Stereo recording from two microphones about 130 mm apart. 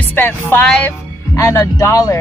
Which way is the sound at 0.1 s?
15° left (ahead or behind).